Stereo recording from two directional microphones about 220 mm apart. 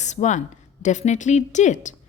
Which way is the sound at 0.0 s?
30° left (ahead or behind).